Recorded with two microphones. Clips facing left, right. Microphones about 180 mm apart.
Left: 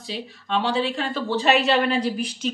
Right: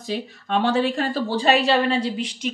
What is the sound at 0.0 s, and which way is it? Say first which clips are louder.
A woman's voice: right 5 dB; 45° right (ahead or behind).